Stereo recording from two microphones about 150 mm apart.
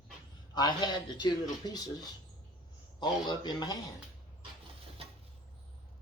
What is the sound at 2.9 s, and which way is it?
Speech, 30° left (ahead or behind).